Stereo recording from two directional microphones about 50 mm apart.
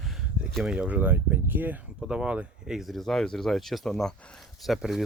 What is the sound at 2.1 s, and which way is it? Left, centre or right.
Speech, right.